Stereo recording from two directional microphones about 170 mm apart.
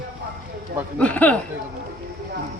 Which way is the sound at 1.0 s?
10° left (ahead or behind).